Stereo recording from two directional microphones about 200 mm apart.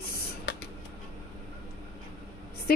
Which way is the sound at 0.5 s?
60° left (ahead or behind).